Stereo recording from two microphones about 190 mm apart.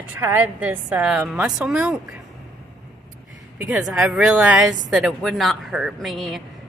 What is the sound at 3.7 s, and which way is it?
Speech, 5° right (ahead or behind).